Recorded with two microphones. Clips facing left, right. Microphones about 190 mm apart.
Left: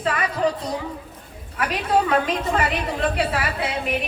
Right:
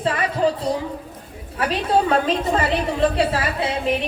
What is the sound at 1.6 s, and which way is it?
A woman's voice, 30° right (ahead or behind).